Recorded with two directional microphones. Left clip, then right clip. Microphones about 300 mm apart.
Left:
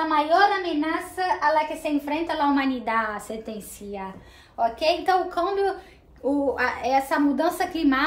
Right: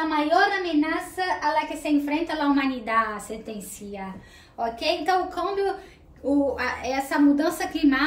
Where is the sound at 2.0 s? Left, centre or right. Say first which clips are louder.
Left 1 dB; centre.